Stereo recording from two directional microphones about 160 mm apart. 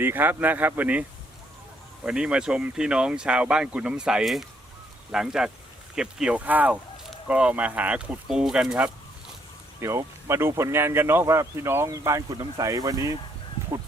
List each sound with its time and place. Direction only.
0.0 s speech: 10° right (ahead or behind)
2.0 s speech: 5° right (ahead or behind)
9.8 s speech: 20° right (ahead or behind)